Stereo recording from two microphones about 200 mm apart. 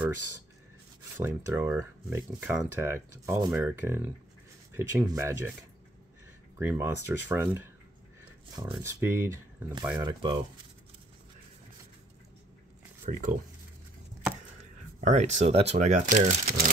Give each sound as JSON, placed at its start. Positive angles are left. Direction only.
{"t": 1.1, "sound": "speech", "side_deg": -10}
{"t": 6.6, "sound": "speech", "side_deg": -10}
{"t": 8.7, "sound": "speech", "side_deg": -15}
{"t": 9.9, "sound": "speech", "side_deg": -20}
{"t": 13.0, "sound": "speech", "side_deg": -40}
{"t": 15.0, "sound": "speech", "side_deg": -35}